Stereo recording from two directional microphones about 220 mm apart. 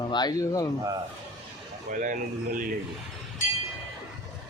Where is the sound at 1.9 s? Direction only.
35° right (ahead or behind).